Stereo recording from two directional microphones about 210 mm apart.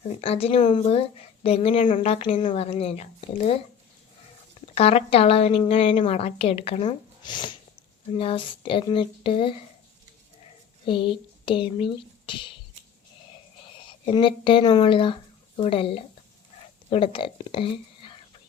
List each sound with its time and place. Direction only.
0.2 s a woman's voice: 25° left (ahead or behind)
4.7 s a woman's voice: 30° left (ahead or behind)
10.8 s speech: 25° left (ahead or behind)
14.0 s a woman's voice: 25° left (ahead or behind)